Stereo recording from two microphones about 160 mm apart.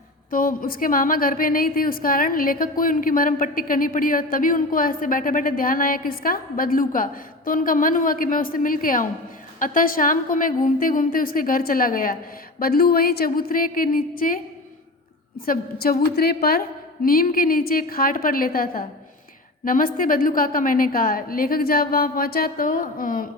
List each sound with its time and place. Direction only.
0.3 s a woman's voice: 60° left (ahead or behind)